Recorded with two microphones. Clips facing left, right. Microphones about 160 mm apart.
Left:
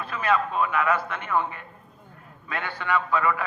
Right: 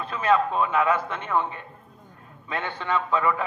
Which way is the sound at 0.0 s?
25° right (ahead or behind).